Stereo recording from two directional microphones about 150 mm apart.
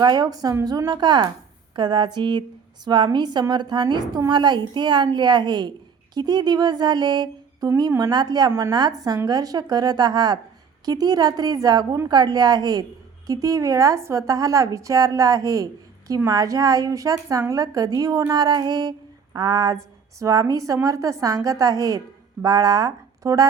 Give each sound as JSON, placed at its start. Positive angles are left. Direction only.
{"t": 0.0, "sound": "a woman's voice", "side_deg": -30}